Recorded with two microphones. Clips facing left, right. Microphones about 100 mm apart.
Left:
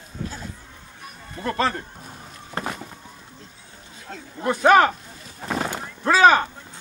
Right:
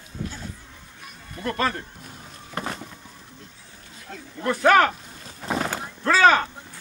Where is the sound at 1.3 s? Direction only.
30° left (ahead or behind).